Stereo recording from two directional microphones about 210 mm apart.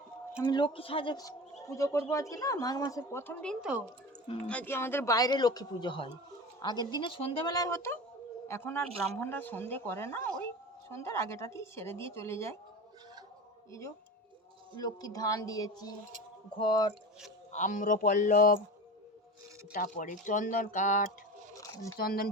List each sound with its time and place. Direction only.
0.3 s speech: 15° left (ahead or behind)
14.8 s speech: 20° left (ahead or behind)
17.5 s speech: 40° left (ahead or behind)
19.7 s speech: 40° left (ahead or behind)
21.6 s a sound: 15° left (ahead or behind)
21.9 s speech: 45° left (ahead or behind)